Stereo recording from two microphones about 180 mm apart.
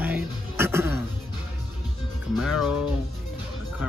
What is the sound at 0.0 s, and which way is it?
Music, 10° right (ahead or behind).